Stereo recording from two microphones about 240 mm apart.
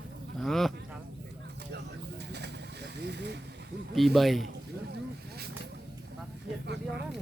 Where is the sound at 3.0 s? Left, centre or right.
Right.